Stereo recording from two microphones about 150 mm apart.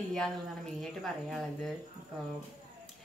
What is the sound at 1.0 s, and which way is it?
Speech, centre (ahead or behind).